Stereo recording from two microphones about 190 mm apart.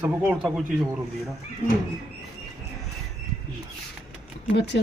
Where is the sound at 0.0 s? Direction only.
5° right (ahead or behind).